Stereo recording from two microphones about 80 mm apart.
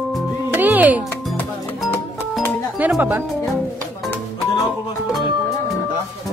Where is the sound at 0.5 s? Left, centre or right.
Right.